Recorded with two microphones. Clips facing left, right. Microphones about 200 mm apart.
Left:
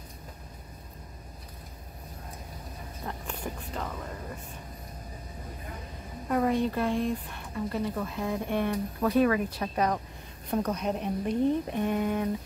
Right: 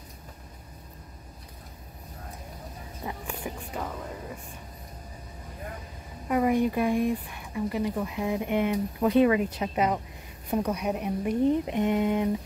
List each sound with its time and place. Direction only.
3.1 s speech: 10° right (ahead or behind)
6.2 s speech: 10° right (ahead or behind)